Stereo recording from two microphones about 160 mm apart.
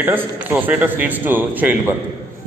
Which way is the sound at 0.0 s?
15° right (ahead or behind).